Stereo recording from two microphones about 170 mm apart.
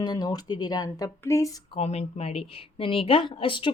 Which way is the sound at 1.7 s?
40° left (ahead or behind).